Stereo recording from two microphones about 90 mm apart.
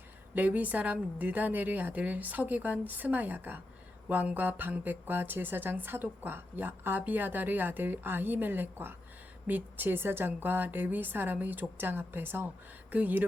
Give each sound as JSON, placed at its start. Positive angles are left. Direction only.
{"t": 0.3, "sound": "a woman's voice", "side_deg": -20}